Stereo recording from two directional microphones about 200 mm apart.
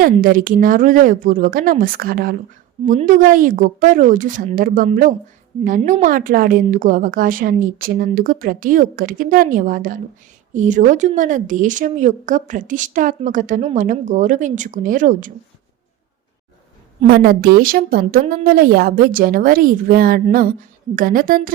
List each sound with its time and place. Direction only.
0.0 s a woman's voice: 45° right (ahead or behind)
17.1 s a woman's voice: 50° right (ahead or behind)